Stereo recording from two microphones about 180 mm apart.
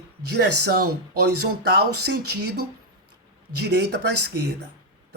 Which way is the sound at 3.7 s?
70° right (ahead or behind).